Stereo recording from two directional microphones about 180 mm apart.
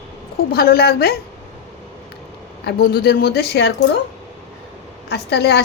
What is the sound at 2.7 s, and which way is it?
A woman's voice, 60° left (ahead or behind).